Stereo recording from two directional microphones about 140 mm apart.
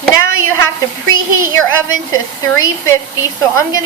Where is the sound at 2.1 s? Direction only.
25° left (ahead or behind).